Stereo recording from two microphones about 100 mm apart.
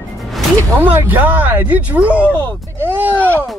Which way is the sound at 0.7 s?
20° right (ahead or behind).